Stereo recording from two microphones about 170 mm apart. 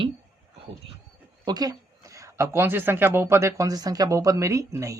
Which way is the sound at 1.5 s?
20° right (ahead or behind).